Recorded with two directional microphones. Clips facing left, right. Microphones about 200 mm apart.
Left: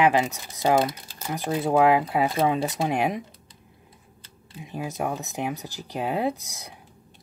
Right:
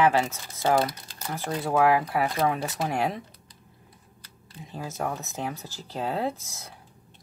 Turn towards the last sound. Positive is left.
turn(degrees=15)  # may be behind; listen again after turning